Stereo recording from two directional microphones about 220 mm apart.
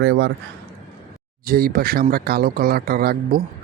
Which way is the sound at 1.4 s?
40° right (ahead or behind).